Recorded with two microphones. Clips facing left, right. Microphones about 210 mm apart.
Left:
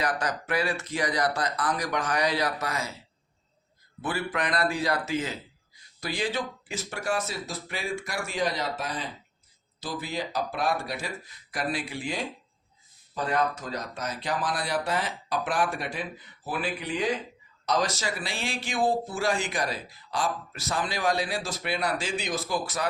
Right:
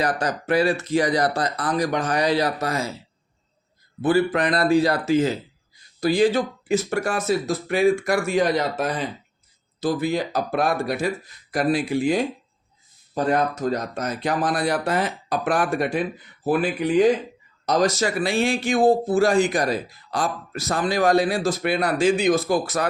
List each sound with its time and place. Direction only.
0.0 s speech: 30° right (ahead or behind)
4.0 s speech: 30° right (ahead or behind); by 22.9 s 50° right (ahead or behind)